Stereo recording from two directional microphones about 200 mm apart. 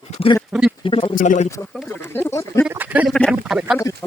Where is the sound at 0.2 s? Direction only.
30° left (ahead or behind).